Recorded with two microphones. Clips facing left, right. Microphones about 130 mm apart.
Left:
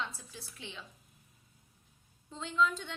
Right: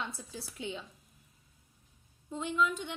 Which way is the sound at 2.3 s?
15° right (ahead or behind).